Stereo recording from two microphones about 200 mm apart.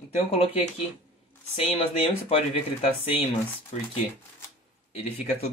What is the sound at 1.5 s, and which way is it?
Speech, 30° left (ahead or behind).